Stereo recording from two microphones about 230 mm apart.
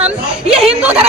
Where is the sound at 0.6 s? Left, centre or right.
Centre.